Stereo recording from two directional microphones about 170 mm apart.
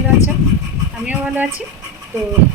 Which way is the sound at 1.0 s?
10° right (ahead or behind).